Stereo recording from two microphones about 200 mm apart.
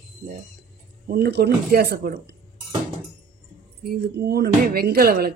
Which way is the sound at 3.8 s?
50° right (ahead or behind).